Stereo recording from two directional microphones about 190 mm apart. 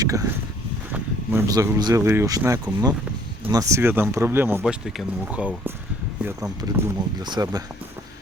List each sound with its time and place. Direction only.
0.0 s speech: 20° right (ahead or behind)
6.6 s speech: 20° right (ahead or behind)